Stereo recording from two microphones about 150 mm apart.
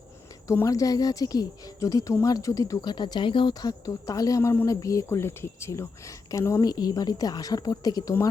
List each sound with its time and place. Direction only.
0.4 s speech: 20° left (ahead or behind)